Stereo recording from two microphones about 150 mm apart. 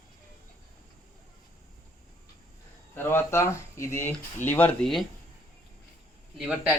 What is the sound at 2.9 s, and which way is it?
Speech, 15° left (ahead or behind).